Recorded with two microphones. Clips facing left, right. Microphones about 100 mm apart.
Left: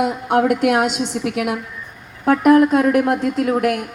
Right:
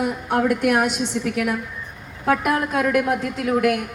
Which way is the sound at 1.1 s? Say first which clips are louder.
Left 2 dB; 70° left (ahead or behind).